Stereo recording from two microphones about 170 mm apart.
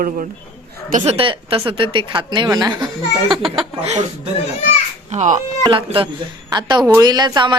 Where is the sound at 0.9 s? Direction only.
35° right (ahead or behind).